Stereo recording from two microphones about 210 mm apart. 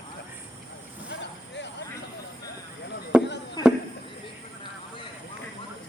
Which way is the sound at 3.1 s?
5° right (ahead or behind).